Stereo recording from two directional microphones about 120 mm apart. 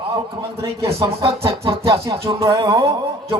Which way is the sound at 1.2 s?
50° right (ahead or behind).